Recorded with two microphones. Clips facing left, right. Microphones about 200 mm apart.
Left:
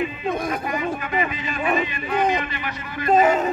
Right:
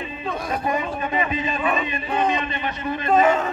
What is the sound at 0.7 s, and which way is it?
Speech, 30° right (ahead or behind).